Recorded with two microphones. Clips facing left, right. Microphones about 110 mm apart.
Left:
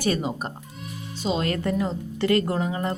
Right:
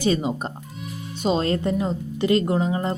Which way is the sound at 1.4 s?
25° right (ahead or behind).